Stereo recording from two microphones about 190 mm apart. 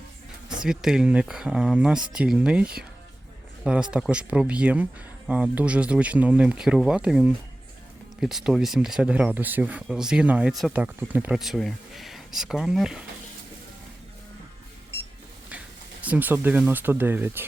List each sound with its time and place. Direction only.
0.6 s speech: 5° right (ahead or behind)
16.0 s speech: 10° right (ahead or behind)